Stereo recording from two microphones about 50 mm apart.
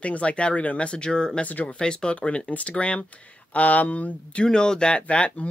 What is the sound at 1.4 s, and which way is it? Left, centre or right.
Speech, left.